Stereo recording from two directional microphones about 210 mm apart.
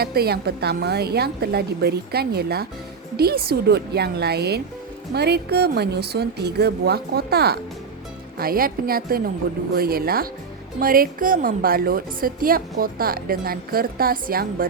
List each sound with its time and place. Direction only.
0.0 s a woman's voice: 50° right (ahead or behind)